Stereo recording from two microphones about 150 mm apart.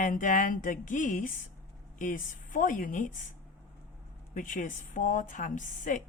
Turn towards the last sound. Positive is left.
turn(degrees=55)  # may be behind; listen again after turning